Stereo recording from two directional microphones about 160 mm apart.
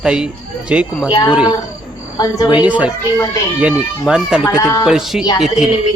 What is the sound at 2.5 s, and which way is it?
Speech, 10° right (ahead or behind).